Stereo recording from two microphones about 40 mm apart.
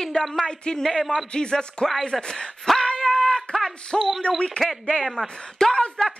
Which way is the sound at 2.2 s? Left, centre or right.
Centre.